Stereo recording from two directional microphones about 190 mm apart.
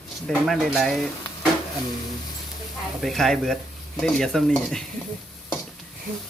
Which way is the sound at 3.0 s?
Centre (ahead or behind).